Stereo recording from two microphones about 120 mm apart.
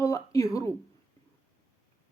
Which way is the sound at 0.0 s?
25° left (ahead or behind).